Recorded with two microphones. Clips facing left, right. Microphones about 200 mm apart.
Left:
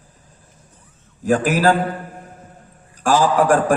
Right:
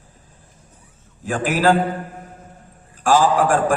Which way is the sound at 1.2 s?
40° left (ahead or behind).